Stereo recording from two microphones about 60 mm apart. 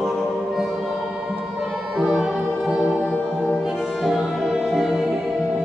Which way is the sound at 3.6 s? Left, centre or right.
Centre.